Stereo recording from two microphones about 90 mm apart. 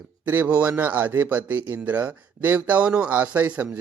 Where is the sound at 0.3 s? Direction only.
15° right (ahead or behind).